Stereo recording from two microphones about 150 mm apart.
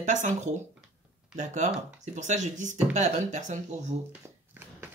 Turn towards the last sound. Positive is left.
turn(degrees=-55)  # may be behind; listen again after turning